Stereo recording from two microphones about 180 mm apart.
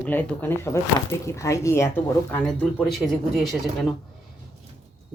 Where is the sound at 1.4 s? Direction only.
15° left (ahead or behind).